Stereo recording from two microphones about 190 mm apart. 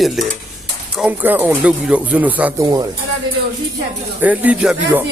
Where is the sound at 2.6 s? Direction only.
20° right (ahead or behind).